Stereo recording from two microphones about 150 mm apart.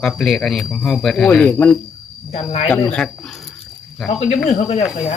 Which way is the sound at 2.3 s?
45° left (ahead or behind).